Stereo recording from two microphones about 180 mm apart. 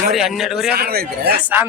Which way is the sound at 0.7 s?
60° right (ahead or behind).